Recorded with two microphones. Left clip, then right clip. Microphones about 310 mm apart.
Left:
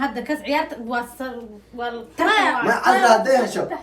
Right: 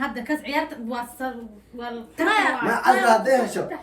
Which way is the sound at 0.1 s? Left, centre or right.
Centre.